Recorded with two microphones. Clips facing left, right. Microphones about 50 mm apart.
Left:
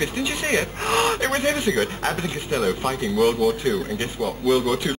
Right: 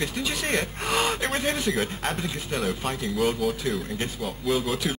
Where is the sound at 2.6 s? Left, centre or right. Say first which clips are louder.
Left 5 dB; centre.